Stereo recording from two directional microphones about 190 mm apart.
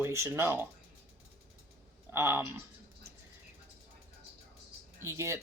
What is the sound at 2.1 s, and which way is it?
Speech, 15° right (ahead or behind).